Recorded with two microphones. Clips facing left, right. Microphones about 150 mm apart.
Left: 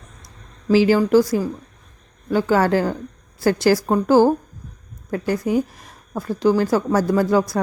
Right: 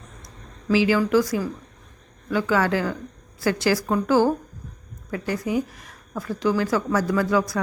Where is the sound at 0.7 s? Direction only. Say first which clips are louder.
Left 5 dB; 35° left (ahead or behind).